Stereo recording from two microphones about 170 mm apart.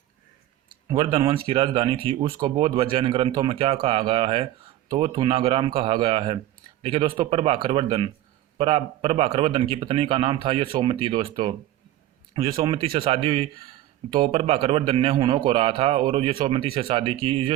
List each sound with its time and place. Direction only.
0.9 s a man's voice: 30° right (ahead or behind)